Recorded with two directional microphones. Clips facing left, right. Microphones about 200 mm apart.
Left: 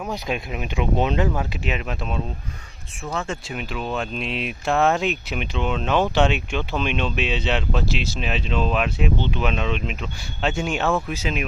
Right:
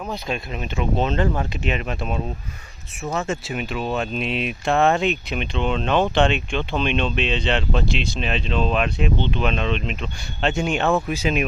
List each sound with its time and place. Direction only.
0.1 s speech: 15° left (ahead or behind)
10.9 s speech: 15° right (ahead or behind)